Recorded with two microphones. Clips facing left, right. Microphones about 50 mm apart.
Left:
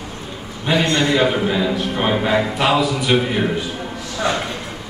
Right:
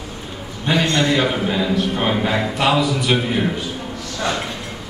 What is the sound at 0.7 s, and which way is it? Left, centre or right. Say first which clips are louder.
A man's voice: left 1 dB; centre.